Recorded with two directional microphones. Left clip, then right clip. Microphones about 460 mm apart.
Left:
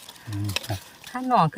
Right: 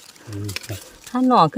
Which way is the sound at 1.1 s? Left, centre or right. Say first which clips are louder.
Right 5 dB; centre.